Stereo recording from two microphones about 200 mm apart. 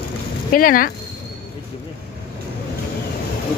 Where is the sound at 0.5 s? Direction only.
45° left (ahead or behind).